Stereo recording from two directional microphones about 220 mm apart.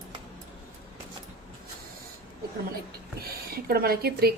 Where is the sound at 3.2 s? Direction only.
45° right (ahead or behind).